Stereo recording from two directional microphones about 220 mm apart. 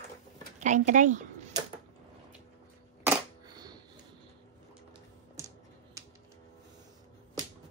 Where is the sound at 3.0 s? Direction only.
20° right (ahead or behind).